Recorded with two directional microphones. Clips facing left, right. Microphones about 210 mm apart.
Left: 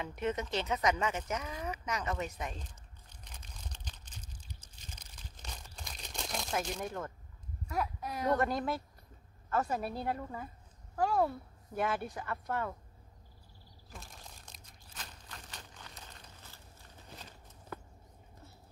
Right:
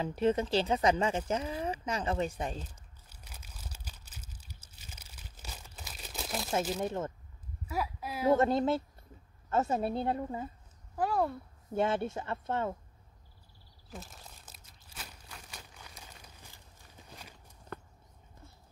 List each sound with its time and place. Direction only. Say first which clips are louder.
0.0 s speech: right 6 dB; 30° right (ahead or behind)
2.6 s crumpling: right 4 dB; 5° right (ahead or behind)
6.8 s speech: right 5 dB; 25° right (ahead or behind)
7.6 s speech: even; 5° right (ahead or behind)
8.4 s speech: right 5 dB; 25° right (ahead or behind)
11.0 s speech: even; centre (ahead or behind)
11.7 s speech: right 4 dB; 25° right (ahead or behind)
13.9 s crumpling: right 4 dB; 5° right (ahead or behind)